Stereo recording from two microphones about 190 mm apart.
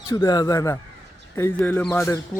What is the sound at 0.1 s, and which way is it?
Speech, 20° left (ahead or behind).